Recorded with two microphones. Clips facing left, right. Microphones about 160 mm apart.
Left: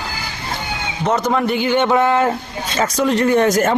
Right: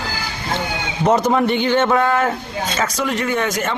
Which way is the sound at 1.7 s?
15° left (ahead or behind).